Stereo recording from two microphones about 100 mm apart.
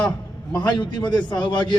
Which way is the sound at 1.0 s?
50° left (ahead or behind).